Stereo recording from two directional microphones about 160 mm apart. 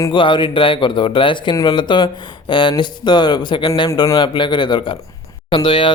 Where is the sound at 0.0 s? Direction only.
30° left (ahead or behind).